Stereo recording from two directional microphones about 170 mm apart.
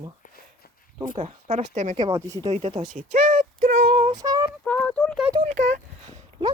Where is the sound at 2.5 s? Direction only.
35° right (ahead or behind).